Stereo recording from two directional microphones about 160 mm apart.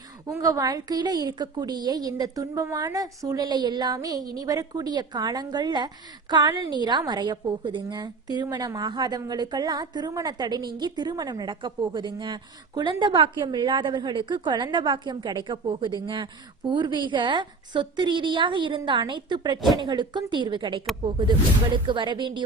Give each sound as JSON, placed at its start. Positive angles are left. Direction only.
{"t": 0.3, "sound": "a woman's voice", "side_deg": -20}
{"t": 21.8, "sound": "a woman's voice", "side_deg": -30}